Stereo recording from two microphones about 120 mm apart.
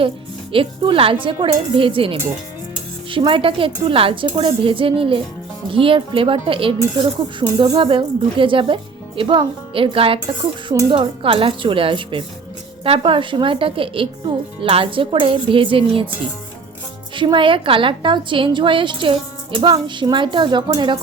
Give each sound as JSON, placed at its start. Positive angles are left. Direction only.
{"t": 0.5, "sound": "a woman's voice", "side_deg": -50}
{"t": 17.2, "sound": "a woman's voice", "side_deg": -45}